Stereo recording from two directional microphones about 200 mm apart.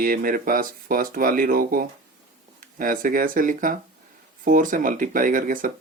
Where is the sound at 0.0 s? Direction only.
45° right (ahead or behind).